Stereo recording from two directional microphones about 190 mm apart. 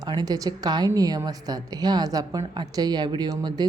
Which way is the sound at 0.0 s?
20° right (ahead or behind).